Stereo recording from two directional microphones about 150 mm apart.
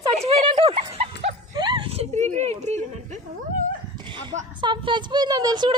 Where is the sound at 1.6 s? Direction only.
30° right (ahead or behind); by 3.2 s 50° right (ahead or behind).